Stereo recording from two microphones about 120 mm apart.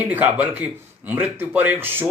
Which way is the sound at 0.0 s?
15° right (ahead or behind).